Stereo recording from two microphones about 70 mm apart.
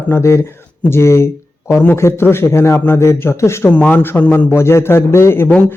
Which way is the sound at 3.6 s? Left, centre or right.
Left.